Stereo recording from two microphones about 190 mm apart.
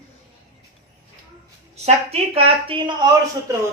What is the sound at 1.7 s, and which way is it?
A woman's voice, 35° right (ahead or behind).